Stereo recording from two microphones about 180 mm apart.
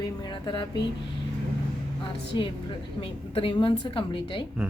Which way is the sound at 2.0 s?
25° left (ahead or behind).